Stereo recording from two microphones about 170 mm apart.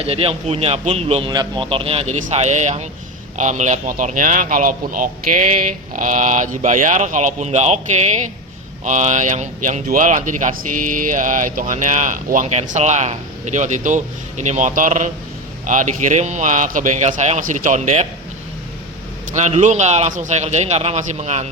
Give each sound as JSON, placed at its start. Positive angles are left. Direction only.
{"t": 0.0, "sound": "a man's voice", "side_deg": -35}
{"t": 19.3, "sound": "speech", "side_deg": -45}